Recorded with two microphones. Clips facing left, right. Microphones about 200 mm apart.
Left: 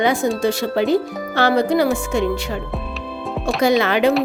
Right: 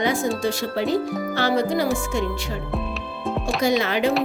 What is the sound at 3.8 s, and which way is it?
Speech, 65° left (ahead or behind).